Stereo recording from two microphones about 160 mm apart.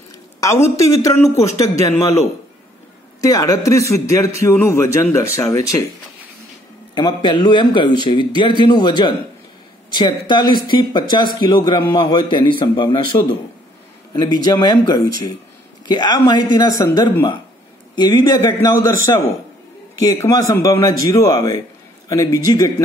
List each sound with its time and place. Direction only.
0.4 s a man's voice: 20° left (ahead or behind)
7.0 s a man's voice: 30° left (ahead or behind)